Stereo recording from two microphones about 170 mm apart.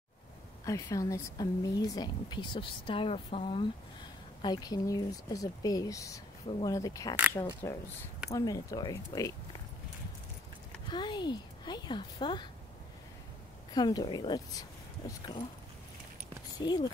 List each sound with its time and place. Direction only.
0.7 s a woman's voice: 20° left (ahead or behind); by 3.6 s 35° left (ahead or behind)
4.4 s a woman's voice: 25° left (ahead or behind)
10.9 s a woman's voice: 25° left (ahead or behind)
13.7 s a woman's voice: 25° left (ahead or behind)
16.5 s a woman's voice: 25° left (ahead or behind)